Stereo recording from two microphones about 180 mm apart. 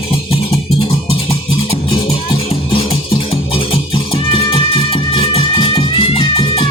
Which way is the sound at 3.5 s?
30° left (ahead or behind).